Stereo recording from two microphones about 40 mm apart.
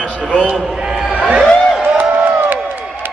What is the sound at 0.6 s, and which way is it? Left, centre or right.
Speech, centre.